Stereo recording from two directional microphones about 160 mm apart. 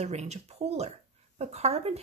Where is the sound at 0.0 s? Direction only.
45° right (ahead or behind).